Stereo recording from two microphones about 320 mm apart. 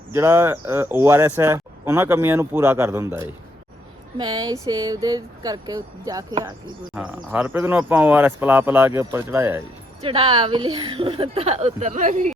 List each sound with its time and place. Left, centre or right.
0.1 s speech: centre; by 12.3 s right